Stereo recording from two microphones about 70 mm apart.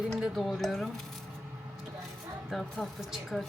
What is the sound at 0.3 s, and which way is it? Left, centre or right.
Speech, centre.